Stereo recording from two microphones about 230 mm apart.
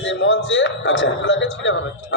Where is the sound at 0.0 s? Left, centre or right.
Left.